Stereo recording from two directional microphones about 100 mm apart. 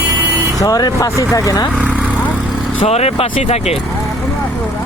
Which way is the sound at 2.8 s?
90° left.